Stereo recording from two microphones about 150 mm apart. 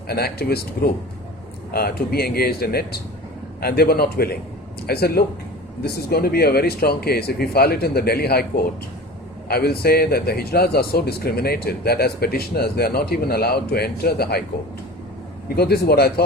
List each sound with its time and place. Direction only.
0.1 s speech: 90° left
1.7 s speech: 90° left
15.4 s speech: 90° left